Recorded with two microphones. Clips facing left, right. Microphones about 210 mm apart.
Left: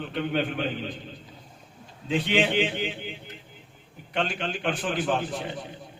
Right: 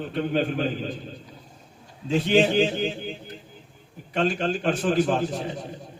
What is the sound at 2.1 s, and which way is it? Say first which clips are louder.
A man's voice: right 4 dB; 40° right (ahead or behind).